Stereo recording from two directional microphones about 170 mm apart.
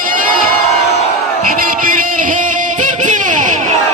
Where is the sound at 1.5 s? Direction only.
55° right (ahead or behind).